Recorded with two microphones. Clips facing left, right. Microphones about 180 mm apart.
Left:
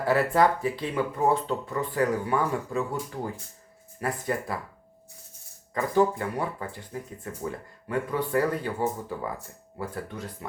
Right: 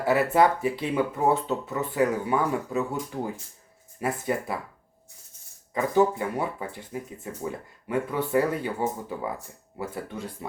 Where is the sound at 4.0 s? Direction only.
20° right (ahead or behind).